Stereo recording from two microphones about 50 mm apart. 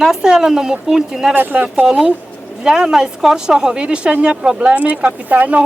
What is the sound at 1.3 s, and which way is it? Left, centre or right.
Speech, right.